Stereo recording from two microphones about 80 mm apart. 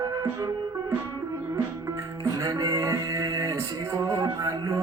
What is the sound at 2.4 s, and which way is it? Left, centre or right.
Mantra, right.